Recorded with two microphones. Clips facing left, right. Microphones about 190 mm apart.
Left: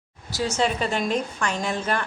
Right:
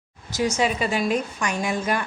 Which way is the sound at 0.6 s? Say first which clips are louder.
Left 2 dB; 10° right (ahead or behind).